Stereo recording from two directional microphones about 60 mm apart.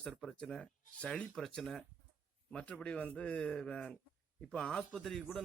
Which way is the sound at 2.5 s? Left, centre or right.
Centre.